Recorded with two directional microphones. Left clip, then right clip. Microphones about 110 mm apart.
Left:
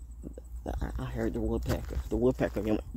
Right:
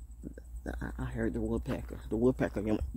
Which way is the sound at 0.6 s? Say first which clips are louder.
Left 2 dB; 40° right (ahead or behind).